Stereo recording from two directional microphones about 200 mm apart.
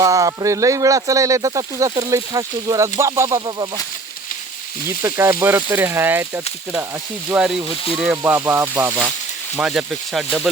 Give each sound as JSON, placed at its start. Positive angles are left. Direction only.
{"t": 0.0, "sound": "speech", "side_deg": -15}
{"t": 4.9, "sound": "speech", "side_deg": -15}